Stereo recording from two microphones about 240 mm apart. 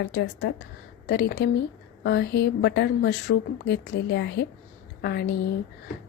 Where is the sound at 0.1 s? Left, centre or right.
Left.